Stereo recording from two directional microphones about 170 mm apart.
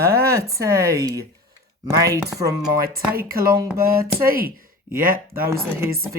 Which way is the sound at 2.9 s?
60° right (ahead or behind).